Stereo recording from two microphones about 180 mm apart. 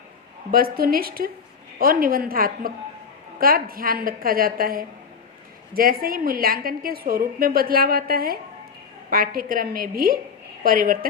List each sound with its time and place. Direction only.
0.5 s a woman's voice: 55° right (ahead or behind)